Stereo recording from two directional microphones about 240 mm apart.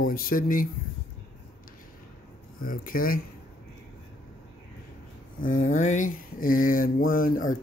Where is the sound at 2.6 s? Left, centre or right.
Left.